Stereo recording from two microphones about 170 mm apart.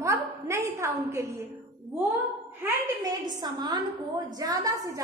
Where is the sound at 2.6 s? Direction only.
20° right (ahead or behind).